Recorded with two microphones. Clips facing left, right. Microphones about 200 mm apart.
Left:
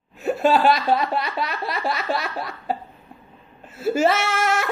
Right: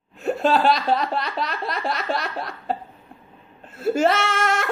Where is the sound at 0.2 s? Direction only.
5° left (ahead or behind).